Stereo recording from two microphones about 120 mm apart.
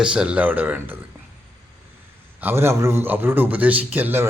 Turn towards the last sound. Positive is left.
turn(degrees=-15)  # may be behind; listen again after turning